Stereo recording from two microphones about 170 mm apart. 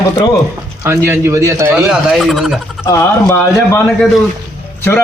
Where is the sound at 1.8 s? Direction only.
Centre (ahead or behind).